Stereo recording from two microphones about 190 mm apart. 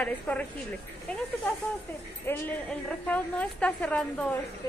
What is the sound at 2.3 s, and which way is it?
A woman's voice, 10° left (ahead or behind).